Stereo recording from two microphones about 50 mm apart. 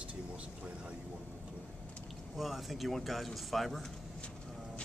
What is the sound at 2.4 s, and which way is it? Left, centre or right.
Speech, centre.